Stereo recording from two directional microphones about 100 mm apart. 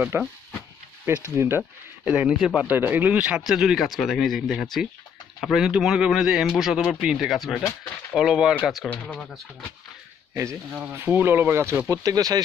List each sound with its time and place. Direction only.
0.1 s speech: 25° right (ahead or behind)
1.3 s speech: 25° right (ahead or behind)
2.0 s speech: 10° right (ahead or behind); by 9.4 s 5° left (ahead or behind)
10.3 s speech: 30° right (ahead or behind)
11.9 s speech: 35° right (ahead or behind)